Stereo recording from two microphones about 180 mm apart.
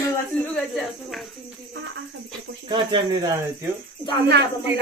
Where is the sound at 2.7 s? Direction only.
25° right (ahead or behind).